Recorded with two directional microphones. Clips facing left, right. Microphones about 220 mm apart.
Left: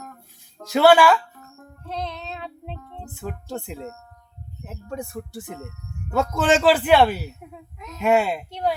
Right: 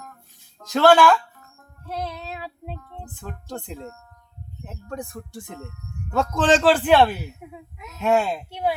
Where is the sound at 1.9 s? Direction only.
5° right (ahead or behind).